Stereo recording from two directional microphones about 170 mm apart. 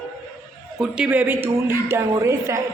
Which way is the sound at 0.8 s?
10° right (ahead or behind).